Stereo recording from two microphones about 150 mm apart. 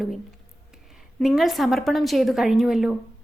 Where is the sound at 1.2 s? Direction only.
Centre (ahead or behind).